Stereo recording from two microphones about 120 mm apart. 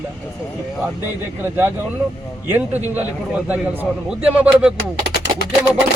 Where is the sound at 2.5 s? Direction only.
15° right (ahead or behind).